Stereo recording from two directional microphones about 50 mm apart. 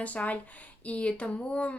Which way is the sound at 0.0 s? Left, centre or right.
Left.